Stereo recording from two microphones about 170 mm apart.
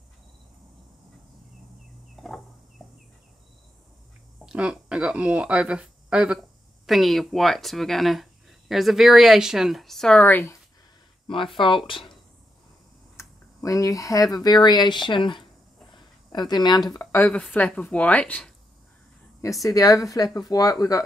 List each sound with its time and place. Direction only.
2.2 s a sound: centre (ahead or behind)
4.5 s speech: 5° right (ahead or behind); by 10.6 s 15° left (ahead or behind)
11.5 s a woman's voice: 30° left (ahead or behind)
13.2 s speech: 20° left (ahead or behind)
19.6 s a woman's voice: 20° left (ahead or behind)